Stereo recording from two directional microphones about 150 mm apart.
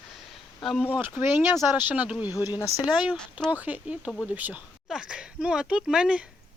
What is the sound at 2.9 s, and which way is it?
Speech, 5° right (ahead or behind).